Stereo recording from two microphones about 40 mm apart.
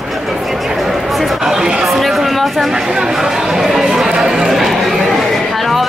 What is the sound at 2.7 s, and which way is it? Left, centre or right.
Speech, centre.